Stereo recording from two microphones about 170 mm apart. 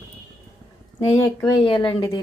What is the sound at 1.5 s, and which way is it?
Speech, 25° left (ahead or behind).